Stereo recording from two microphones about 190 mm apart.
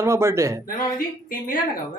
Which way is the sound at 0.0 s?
15° right (ahead or behind).